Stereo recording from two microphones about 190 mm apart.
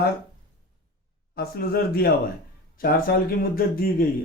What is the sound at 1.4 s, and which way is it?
Speech, 55° left (ahead or behind).